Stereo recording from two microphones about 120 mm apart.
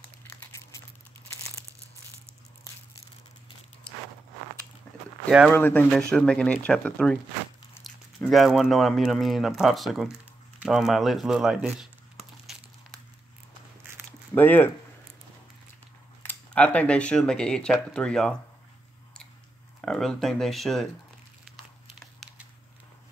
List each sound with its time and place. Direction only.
0.5 s a sound: 25° left (ahead or behind)
5.5 s speech: 15° left (ahead or behind)
8.3 s speech: centre (ahead or behind)
14.3 s speech: 15° left (ahead or behind)
16.2 s speech: 15° left (ahead or behind)
19.8 s speech: 5° left (ahead or behind)
22.2 s a sound: centre (ahead or behind)